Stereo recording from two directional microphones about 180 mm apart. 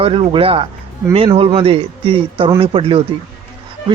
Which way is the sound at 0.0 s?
30° right (ahead or behind).